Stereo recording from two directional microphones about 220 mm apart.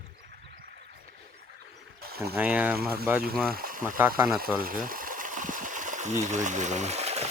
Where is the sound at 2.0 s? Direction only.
45° right (ahead or behind).